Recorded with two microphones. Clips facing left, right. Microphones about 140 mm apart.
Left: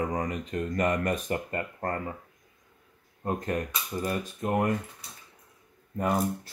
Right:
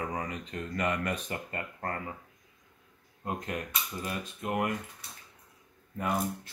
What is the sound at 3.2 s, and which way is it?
Speech, 40° left (ahead or behind).